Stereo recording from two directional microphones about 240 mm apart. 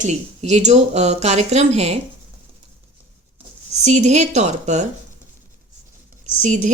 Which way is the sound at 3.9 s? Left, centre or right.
Right.